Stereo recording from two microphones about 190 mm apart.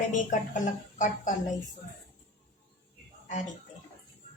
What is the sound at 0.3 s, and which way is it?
Speech, 40° left (ahead or behind).